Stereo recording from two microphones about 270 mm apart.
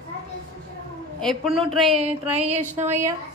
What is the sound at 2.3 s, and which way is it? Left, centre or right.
Speech, right.